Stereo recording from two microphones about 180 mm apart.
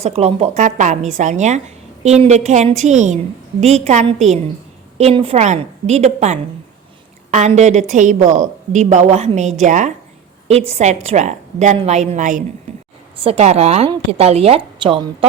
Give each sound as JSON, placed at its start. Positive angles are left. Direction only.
{"t": 0.0, "sound": "a woman's voice", "side_deg": -35}